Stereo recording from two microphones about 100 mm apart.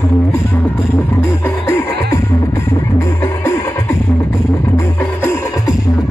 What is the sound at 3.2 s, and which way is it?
Music, 25° left (ahead or behind).